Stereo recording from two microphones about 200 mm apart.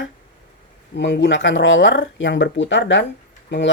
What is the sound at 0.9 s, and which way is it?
Speech, 60° left (ahead or behind).